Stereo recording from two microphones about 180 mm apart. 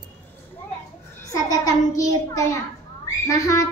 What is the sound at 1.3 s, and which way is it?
A child's voice, 20° left (ahead or behind).